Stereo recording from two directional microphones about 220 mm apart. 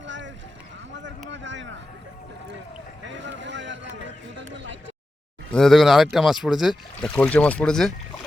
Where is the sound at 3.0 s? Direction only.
55° right (ahead or behind).